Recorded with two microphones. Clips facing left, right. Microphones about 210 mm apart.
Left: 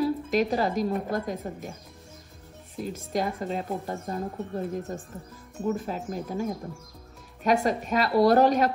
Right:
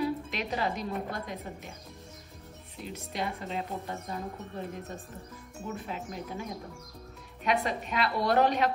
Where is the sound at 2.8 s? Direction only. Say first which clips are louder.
Left 7 dB; 45° left (ahead or behind).